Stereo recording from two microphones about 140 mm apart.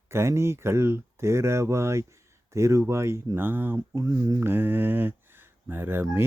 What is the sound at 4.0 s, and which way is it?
Speech, 25° right (ahead or behind).